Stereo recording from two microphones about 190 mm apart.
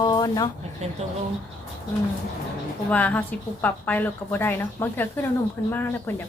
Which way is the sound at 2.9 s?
10° left (ahead or behind).